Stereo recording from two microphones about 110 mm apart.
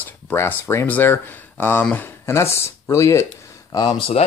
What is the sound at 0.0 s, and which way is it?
Speech, 20° left (ahead or behind).